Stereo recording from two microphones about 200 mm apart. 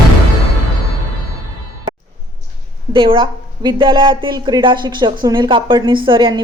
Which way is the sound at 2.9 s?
25° right (ahead or behind).